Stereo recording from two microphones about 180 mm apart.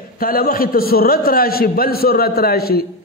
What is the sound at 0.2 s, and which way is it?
A man's voice, 55° left (ahead or behind).